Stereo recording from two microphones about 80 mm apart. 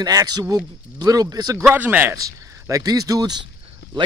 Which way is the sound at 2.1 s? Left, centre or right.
Right.